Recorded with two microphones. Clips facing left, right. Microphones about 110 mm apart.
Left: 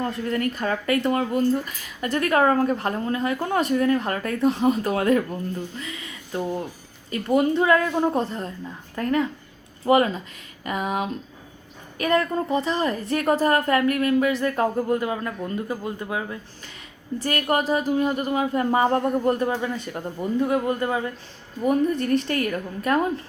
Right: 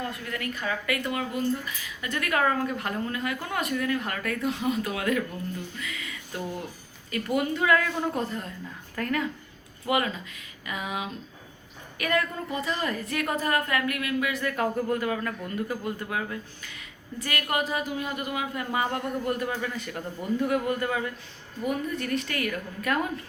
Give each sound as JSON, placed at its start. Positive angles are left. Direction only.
{"t": 0.0, "sound": "a woman's voice", "side_deg": 35}
{"t": 9.8, "sound": "speech", "side_deg": 35}
{"t": 11.9, "sound": "speech", "side_deg": 30}
{"t": 17.2, "sound": "speech", "side_deg": 35}
{"t": 21.6, "sound": "speech", "side_deg": 40}